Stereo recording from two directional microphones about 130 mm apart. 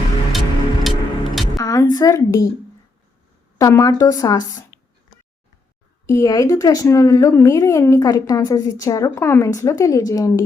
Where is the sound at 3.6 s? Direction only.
25° left (ahead or behind).